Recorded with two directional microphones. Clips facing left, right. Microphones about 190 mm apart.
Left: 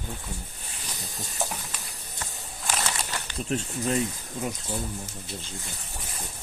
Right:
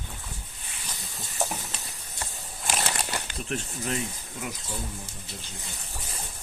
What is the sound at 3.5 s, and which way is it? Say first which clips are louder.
Speech: left 5 dB; 30° left (ahead or behind).